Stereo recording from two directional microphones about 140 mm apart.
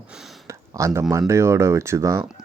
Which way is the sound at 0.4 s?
20° right (ahead or behind).